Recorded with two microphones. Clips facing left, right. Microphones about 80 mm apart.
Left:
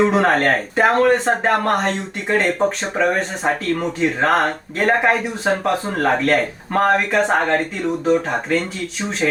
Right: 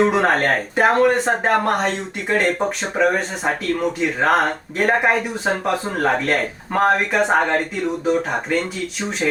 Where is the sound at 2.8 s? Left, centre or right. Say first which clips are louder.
Even; centre.